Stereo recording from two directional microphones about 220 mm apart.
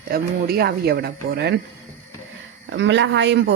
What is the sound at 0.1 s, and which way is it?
A man's voice, 45° right (ahead or behind).